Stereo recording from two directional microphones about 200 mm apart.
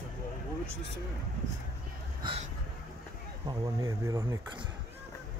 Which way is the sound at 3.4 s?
15° right (ahead or behind).